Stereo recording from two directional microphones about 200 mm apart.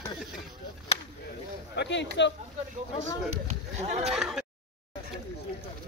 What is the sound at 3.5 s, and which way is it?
Speech, 35° right (ahead or behind).